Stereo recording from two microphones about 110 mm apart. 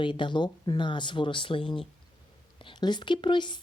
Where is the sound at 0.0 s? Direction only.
50° left (ahead or behind).